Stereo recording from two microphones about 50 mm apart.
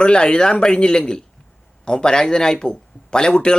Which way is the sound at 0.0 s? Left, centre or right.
Centre.